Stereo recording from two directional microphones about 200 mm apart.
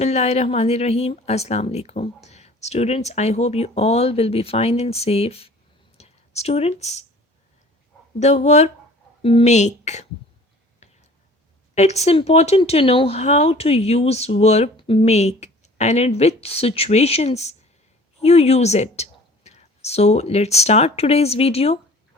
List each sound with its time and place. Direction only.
0.0 s speech: 35° left (ahead or behind)
8.2 s speech: 35° left (ahead or behind)
10.8 s a sound: 35° left (ahead or behind)
11.7 s speech: 35° left (ahead or behind)